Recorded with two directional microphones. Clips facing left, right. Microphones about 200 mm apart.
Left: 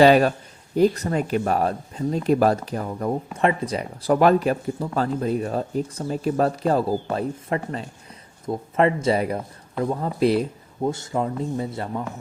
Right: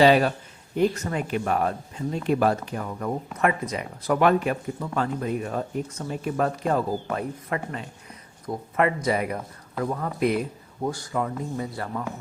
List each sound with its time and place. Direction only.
0.0 s speech: 45° left (ahead or behind); by 12.0 s 25° left (ahead or behind)